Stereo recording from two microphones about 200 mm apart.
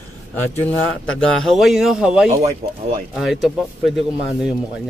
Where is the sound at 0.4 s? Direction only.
5° left (ahead or behind).